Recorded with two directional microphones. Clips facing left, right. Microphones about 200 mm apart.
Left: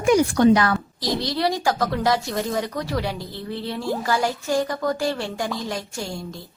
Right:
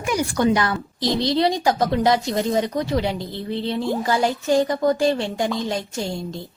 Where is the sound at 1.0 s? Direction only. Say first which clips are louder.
Right 5 dB; 25° right (ahead or behind).